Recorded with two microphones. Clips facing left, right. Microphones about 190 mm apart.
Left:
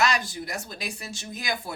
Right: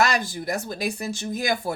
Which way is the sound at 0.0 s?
50° right (ahead or behind).